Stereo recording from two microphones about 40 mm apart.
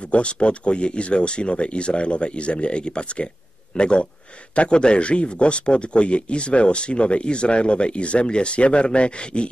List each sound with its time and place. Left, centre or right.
0.0 s speech: left